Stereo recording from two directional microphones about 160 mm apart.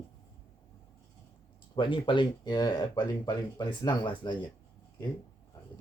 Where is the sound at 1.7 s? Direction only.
30° left (ahead or behind).